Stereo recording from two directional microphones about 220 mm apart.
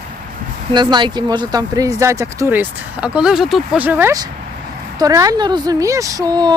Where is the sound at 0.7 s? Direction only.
20° right (ahead or behind).